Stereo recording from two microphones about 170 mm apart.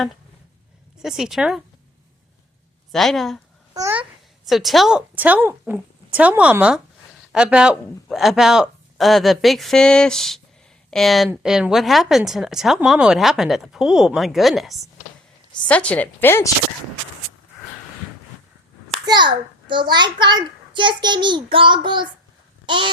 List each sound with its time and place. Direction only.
0.9 s speech: centre (ahead or behind)
2.9 s speech: centre (ahead or behind)
3.8 s a child's voice: 15° right (ahead or behind)
4.4 s a woman's voice: centre (ahead or behind)
19.0 s a child's voice: 25° right (ahead or behind)
22.6 s a sound: 30° right (ahead or behind)